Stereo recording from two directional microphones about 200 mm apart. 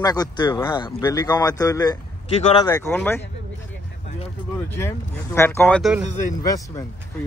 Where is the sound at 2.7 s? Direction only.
10° left (ahead or behind).